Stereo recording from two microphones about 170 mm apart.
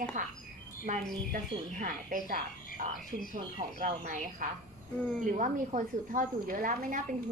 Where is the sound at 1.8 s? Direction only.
50° right (ahead or behind).